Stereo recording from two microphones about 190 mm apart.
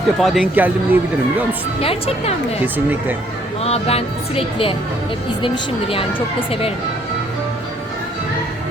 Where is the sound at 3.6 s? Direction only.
30° left (ahead or behind).